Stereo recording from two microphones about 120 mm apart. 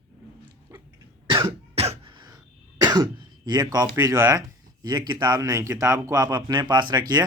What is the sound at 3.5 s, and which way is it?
Speech, 35° right (ahead or behind).